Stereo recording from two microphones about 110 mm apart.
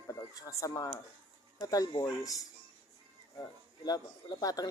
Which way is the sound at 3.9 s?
35° left (ahead or behind).